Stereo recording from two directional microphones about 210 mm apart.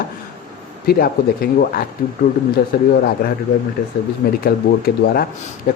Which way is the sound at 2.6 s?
45° left (ahead or behind).